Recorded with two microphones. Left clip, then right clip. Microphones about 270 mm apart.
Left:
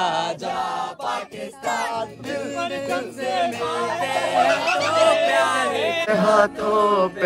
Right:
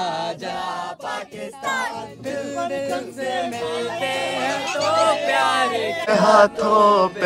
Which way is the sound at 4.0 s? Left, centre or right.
Centre.